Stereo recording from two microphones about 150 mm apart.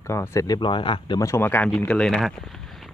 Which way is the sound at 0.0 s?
20° left (ahead or behind).